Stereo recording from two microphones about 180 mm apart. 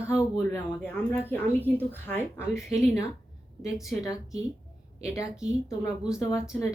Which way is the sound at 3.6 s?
Centre (ahead or behind).